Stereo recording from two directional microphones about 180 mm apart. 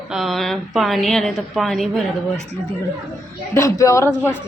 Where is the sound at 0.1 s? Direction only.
Centre (ahead or behind).